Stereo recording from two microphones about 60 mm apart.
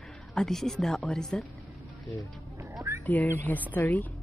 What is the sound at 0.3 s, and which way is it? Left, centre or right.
A woman's voice, centre.